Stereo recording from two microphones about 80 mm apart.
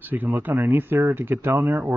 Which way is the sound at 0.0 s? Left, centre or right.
Right.